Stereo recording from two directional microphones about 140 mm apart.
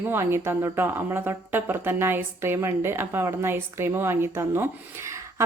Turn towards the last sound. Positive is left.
turn(degrees=-20)  # may be behind; listen again after turning